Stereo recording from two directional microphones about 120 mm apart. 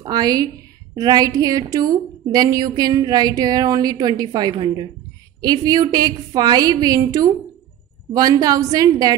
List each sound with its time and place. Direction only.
0.0 s a woman's voice: 35° right (ahead or behind)